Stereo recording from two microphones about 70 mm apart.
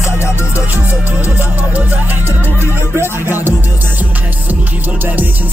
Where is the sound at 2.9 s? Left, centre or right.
Right.